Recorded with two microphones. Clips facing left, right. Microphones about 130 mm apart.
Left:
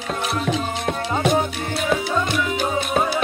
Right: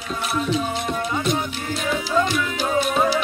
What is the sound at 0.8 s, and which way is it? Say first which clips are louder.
Music: left 2 dB; 60° left (ahead or behind).